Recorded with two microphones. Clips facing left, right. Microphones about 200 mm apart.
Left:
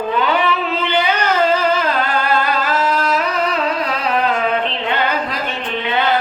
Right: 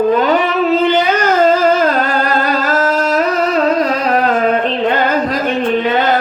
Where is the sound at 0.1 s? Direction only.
45° right (ahead or behind).